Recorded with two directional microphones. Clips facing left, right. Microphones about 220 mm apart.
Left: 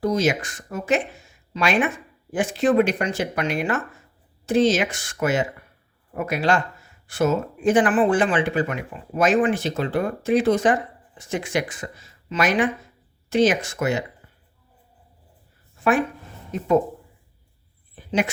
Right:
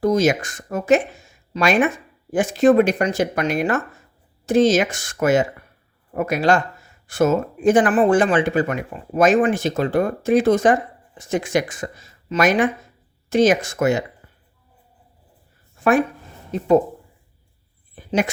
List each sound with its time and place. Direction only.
0.0 s speech: 45° right (ahead or behind)
16.5 s speech: 35° right (ahead or behind)
17.9 s a sound: 45° right (ahead or behind)